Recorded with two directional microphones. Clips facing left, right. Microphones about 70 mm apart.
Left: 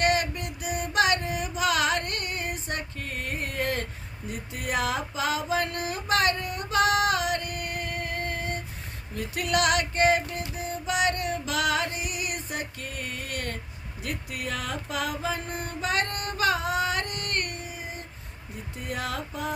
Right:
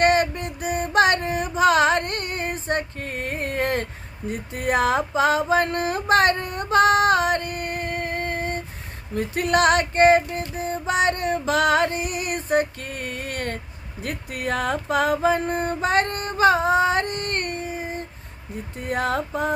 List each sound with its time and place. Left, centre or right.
0.0 s music: right
4.3 s a sound: right
9.1 s music: right